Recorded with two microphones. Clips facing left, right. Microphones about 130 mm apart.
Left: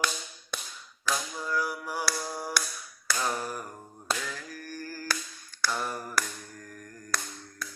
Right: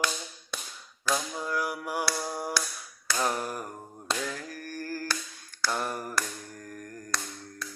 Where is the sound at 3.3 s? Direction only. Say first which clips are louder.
Right 1 dB; 15° right (ahead or behind).